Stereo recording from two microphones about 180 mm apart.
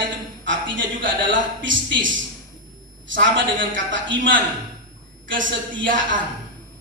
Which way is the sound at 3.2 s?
90° right.